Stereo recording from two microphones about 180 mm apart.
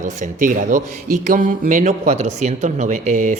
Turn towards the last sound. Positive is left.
turn(degrees=-40)  # may be behind; listen again after turning